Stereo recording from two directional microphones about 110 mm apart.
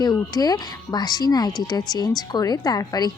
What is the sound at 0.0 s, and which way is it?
Speech, 35° left (ahead or behind).